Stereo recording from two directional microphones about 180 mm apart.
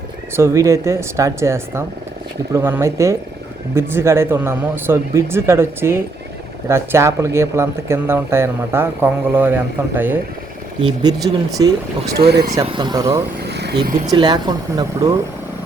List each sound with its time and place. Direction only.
0.3 s speech: 15° right (ahead or behind)
10.8 s speech: 25° right (ahead or behind)
12.1 s speech: 60° right (ahead or behind)
12.6 s speech: 25° right (ahead or behind)
13.4 s vehicle: 65° right (ahead or behind)
14.1 s speech: 25° right (ahead or behind)